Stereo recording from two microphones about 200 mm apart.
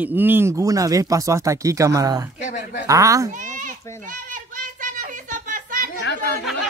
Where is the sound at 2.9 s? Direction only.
15° right (ahead or behind).